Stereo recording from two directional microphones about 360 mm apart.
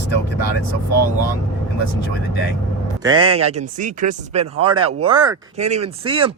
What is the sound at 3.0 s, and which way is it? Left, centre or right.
Speech, centre.